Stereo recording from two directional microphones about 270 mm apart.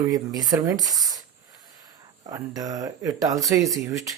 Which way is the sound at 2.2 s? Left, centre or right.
Centre.